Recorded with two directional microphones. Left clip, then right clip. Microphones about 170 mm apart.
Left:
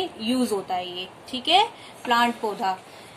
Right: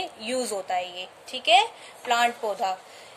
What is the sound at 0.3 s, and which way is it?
Speech, 45° right (ahead or behind).